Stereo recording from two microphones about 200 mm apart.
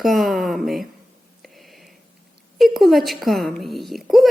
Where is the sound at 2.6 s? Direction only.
Centre (ahead or behind).